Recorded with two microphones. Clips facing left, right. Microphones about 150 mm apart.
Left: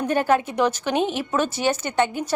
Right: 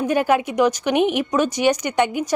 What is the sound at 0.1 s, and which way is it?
A woman's voice, 10° right (ahead or behind).